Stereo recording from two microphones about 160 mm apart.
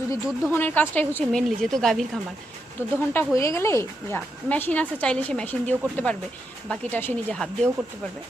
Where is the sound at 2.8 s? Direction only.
15° left (ahead or behind).